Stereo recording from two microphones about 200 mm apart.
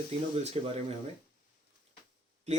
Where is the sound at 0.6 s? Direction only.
30° right (ahead or behind).